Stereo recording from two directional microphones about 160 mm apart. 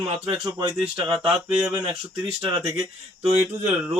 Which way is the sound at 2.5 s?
25° right (ahead or behind).